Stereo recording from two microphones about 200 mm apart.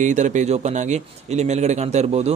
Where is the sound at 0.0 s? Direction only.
35° right (ahead or behind).